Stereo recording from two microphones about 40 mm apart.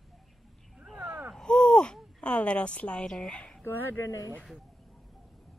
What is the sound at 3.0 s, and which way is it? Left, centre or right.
Speech, centre.